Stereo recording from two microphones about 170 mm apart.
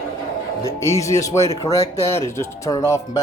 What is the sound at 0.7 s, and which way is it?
Speech, 15° left (ahead or behind).